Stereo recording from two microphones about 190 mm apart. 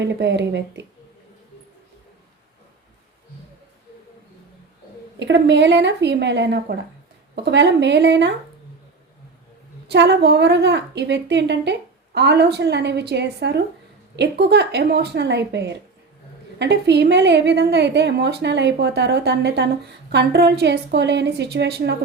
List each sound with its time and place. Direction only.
0.0 s a woman's voice: 65° right (ahead or behind)
5.2 s a woman's voice: 70° right (ahead or behind)
9.9 s a woman's voice: 65° right (ahead or behind)